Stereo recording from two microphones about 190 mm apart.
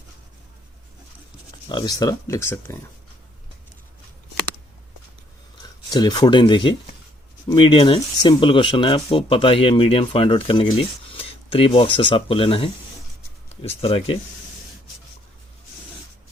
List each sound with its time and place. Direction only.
1.7 s speech: 20° left (ahead or behind)
5.6 s speech: 20° left (ahead or behind)